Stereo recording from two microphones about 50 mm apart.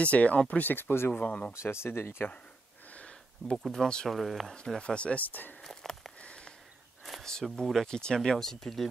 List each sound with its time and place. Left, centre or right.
0.0 s speech: left
0.7 s speech: left
1.1 s speech: left
1.5 s speech: left
2.9 s a sound: left
3.5 s speech: centre
3.8 s speech: centre
4.1 s speech: centre
4.6 s speech: centre; by 5.6 s left
5.6 s a sound: centre
6.2 s a sound: left
7.0 s a sound: centre
7.4 s speech: centre
7.8 s speech: centre